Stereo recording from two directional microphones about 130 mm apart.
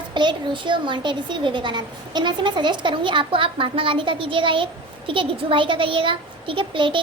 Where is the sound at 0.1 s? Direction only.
35° right (ahead or behind).